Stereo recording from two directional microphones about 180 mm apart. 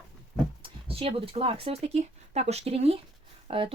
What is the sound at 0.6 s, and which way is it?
Speech, 30° right (ahead or behind).